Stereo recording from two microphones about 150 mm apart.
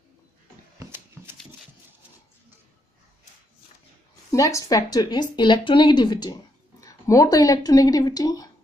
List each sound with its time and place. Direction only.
4.3 s speech: 20° left (ahead or behind)